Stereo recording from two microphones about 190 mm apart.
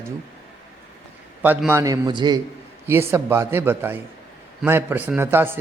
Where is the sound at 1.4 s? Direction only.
10° right (ahead or behind).